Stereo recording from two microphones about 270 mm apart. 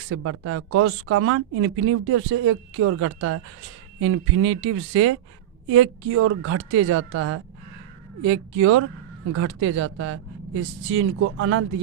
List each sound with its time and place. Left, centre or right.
0.1 s speech: right